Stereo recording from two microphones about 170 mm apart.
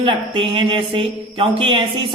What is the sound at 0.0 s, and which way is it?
Speech, 30° right (ahead or behind).